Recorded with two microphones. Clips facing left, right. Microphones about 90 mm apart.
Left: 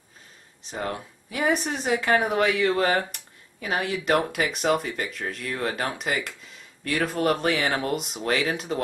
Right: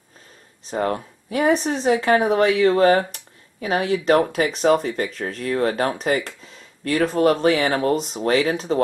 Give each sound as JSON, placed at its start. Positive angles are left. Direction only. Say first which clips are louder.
{"t": 0.7, "sound": "speech", "louder": "right 8 dB", "side_deg": -40}